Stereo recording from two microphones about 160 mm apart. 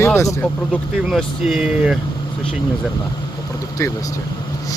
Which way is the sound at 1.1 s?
Centre (ahead or behind).